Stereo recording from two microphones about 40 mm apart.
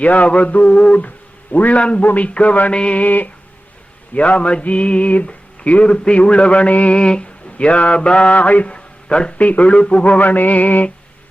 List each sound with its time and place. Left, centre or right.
0.0 s music: left
2.7 s a sound: left
3.0 s music: left
4.1 s music: left
10.2 s music: left